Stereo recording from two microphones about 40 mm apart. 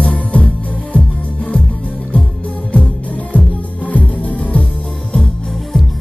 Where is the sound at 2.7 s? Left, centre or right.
Left.